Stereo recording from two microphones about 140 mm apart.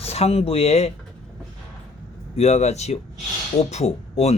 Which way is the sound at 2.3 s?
50° left (ahead or behind).